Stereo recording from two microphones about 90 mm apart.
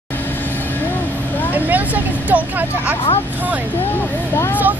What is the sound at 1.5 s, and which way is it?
Speech, 20° right (ahead or behind).